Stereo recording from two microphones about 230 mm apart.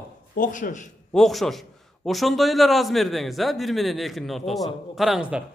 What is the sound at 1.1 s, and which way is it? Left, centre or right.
A man's voice, centre.